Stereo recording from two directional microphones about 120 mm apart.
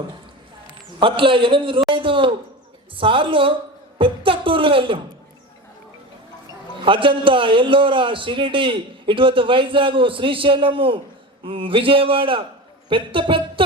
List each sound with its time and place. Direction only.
0.9 s a man's voice: 45° right (ahead or behind)
3.9 s a sound: 45° right (ahead or behind)
6.8 s a man's voice: 45° right (ahead or behind)